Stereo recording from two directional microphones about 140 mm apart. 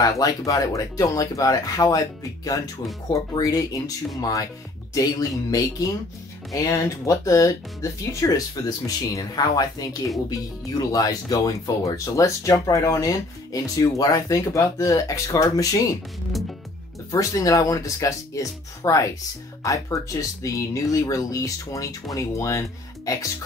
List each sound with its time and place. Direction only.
0.0 s speech: 25° left (ahead or behind)
16.3 s music: centre (ahead or behind)
17.1 s speech: 25° left (ahead or behind)